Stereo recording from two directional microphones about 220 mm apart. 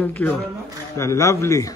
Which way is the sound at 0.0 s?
10° left (ahead or behind).